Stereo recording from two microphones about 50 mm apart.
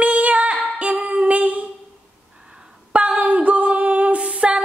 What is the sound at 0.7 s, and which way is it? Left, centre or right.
Music, right.